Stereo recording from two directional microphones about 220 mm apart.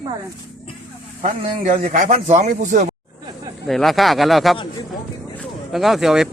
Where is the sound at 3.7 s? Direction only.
Centre (ahead or behind).